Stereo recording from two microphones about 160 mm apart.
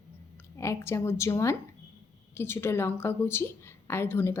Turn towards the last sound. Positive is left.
turn(degrees=15)  # may be behind; listen again after turning